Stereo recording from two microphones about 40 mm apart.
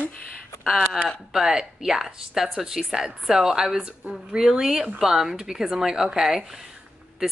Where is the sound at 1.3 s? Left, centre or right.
Centre.